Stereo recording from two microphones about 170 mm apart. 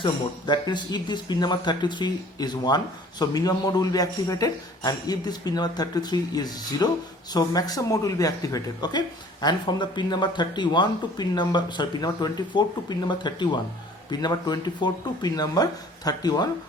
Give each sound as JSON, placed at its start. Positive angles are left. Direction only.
{"t": 0.0, "sound": "speech", "side_deg": 25}